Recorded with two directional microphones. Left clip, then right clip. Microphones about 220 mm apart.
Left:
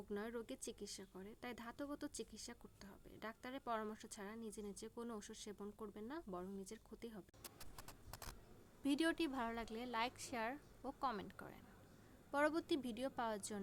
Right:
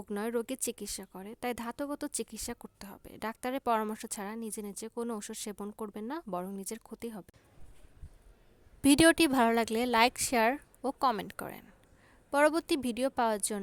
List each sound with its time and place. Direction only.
0.1 s speech: 45° right (ahead or behind)
8.8 s a woman's voice: 45° right (ahead or behind)